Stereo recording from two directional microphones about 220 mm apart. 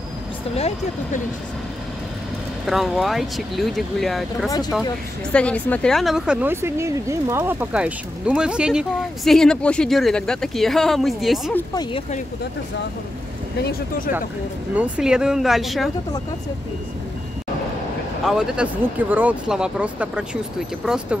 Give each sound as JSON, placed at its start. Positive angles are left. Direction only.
{"t": 0.6, "sound": "speech", "side_deg": 30}
{"t": 2.6, "sound": "speech", "side_deg": 0}
{"t": 4.5, "sound": "speech", "side_deg": 15}
{"t": 5.3, "sound": "speech", "side_deg": 5}
{"t": 11.5, "sound": "speech", "side_deg": 15}
{"t": 13.6, "sound": "speech", "side_deg": 40}
{"t": 14.8, "sound": "speech", "side_deg": -5}
{"t": 18.2, "sound": "speech", "side_deg": -5}